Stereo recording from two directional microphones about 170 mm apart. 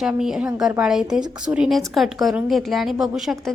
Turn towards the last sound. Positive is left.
turn(degrees=0)  # may be behind; listen again after turning